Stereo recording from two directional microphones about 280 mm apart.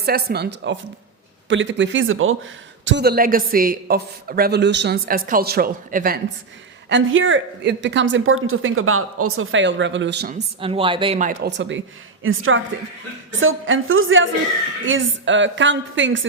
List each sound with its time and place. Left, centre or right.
0.0 s speech: right
6.8 s speech: right
10.3 s a woman's voice: centre; by 16.2 s right